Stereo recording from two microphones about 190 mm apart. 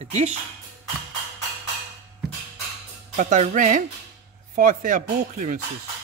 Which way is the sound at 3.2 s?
40° right (ahead or behind).